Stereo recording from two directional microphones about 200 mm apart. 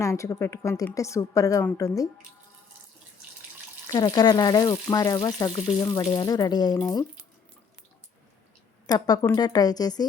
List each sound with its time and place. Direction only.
0.0 s a woman's voice: 15° left (ahead or behind)
3.8 s speech: 20° left (ahead or behind)
8.9 s speech: 20° left (ahead or behind)